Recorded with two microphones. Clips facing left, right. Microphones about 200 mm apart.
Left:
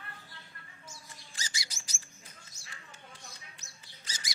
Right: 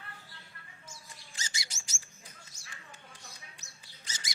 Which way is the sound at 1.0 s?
20° right (ahead or behind).